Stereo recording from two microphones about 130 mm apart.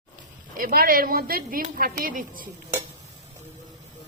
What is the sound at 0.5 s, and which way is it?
A woman's voice, 90° right.